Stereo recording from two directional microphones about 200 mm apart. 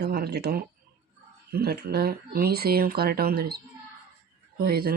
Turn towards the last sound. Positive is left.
turn(degrees=-50)  # may be behind; listen again after turning